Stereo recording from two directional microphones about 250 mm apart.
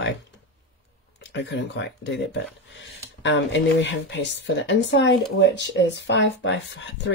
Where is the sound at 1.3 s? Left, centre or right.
Left.